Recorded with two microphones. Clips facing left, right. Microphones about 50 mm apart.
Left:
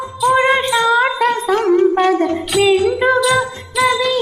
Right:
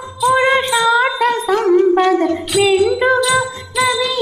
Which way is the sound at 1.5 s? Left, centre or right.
Left.